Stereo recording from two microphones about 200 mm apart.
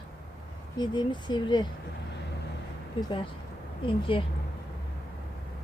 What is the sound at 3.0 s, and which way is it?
Speech, 25° left (ahead or behind).